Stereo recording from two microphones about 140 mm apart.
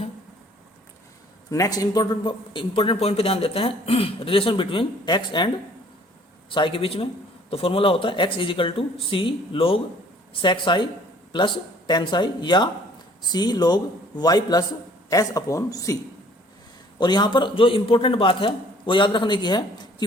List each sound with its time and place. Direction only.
1.5 s a man's voice: 25° left (ahead or behind)
6.5 s a man's voice: 35° left (ahead or behind)
17.0 s a man's voice: 30° left (ahead or behind)